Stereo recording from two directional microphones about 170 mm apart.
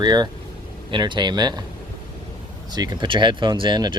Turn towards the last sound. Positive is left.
turn(degrees=-25)  # may be behind; listen again after turning